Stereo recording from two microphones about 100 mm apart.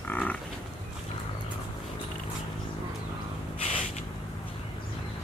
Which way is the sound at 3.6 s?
90° left.